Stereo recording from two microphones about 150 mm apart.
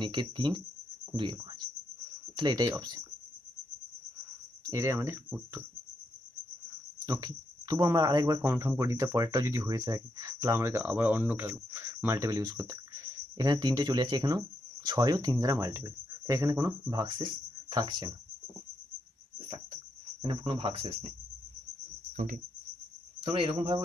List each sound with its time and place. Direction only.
0.0 s speech: 30° right (ahead or behind)
4.6 s speech: 20° right (ahead or behind)
7.1 s speech: 25° right (ahead or behind)
20.2 s speech: 35° right (ahead or behind)
22.1 s cricket: 60° right (ahead or behind)
23.2 s speech: 35° right (ahead or behind)